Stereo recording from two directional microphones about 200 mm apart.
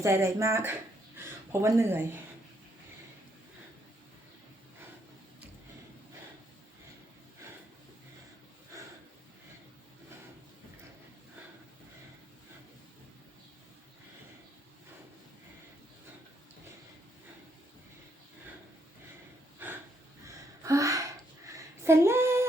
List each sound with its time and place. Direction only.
0.0 s speech: 15° right (ahead or behind)
19.6 s snort: 10° right (ahead or behind)
20.2 s gasp: 15° right (ahead or behind)
21.4 s a sound: 15° right (ahead or behind)